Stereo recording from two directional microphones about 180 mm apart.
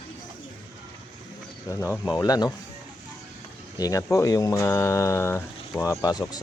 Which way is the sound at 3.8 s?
20° left (ahead or behind).